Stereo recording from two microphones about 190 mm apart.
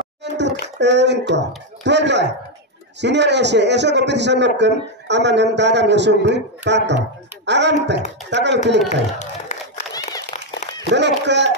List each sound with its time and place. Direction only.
0.2 s a sound: 65° right (ahead or behind)
1.9 s a man's voice: 65° right (ahead or behind)
8.8 s speech: 40° left (ahead or behind)
10.9 s speech: 65° right (ahead or behind)